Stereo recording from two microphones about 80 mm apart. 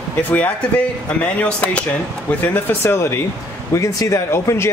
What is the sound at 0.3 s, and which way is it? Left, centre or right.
Speech, centre.